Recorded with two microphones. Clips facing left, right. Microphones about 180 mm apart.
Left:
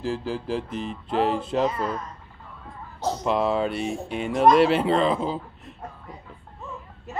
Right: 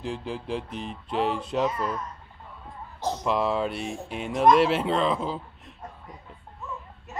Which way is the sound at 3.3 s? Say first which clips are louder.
Left 2 dB; centre (ahead or behind).